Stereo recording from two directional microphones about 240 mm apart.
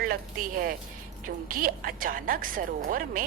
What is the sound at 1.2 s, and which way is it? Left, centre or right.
A woman's voice, right.